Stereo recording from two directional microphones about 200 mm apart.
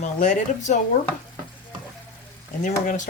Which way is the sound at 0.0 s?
40° left (ahead or behind).